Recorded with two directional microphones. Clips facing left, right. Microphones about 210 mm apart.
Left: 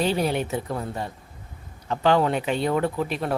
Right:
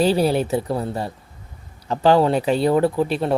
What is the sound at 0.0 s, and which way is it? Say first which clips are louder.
Speech: right 6 dB; 35° right (ahead or behind).